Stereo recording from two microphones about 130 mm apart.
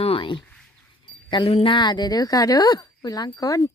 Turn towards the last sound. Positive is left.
turn(degrees=30)  # may be behind; listen again after turning